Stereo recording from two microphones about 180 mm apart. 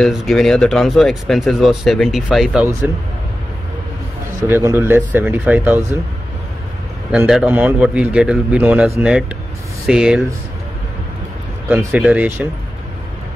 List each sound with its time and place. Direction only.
0.0 s speech: centre (ahead or behind)
4.5 s a man's voice: 10° right (ahead or behind)
7.1 s a man's voice: 5° right (ahead or behind)
11.7 s a man's voice: 5° right (ahead or behind)